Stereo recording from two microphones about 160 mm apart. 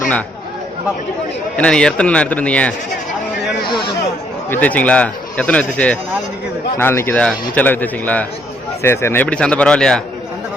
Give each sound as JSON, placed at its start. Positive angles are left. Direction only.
{"t": 1.5, "sound": "a man's voice", "side_deg": 5}
{"t": 4.4, "sound": "a man's voice", "side_deg": 10}